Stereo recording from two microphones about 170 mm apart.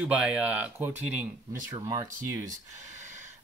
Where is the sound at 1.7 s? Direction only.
20° right (ahead or behind).